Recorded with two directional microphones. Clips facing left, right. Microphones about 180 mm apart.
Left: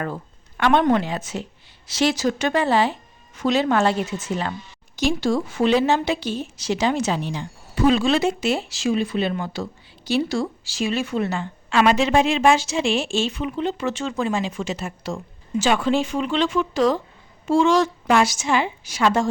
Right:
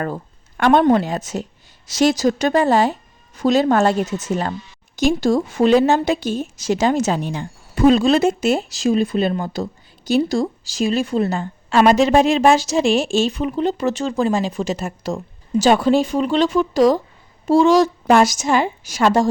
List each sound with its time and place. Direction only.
0.0 s a woman's voice: 45° right (ahead or behind)